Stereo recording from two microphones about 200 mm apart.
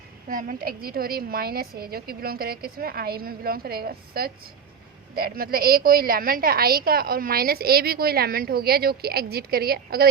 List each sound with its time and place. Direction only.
0.3 s a woman's voice: 40° right (ahead or behind)